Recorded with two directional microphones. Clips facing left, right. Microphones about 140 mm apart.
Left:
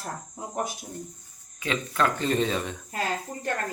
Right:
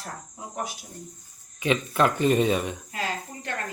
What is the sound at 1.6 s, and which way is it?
Speech, 20° right (ahead or behind).